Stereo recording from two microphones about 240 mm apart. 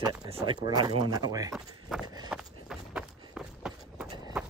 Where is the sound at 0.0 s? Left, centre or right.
Centre.